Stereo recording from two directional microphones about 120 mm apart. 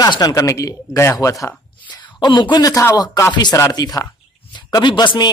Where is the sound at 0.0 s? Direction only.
35° left (ahead or behind).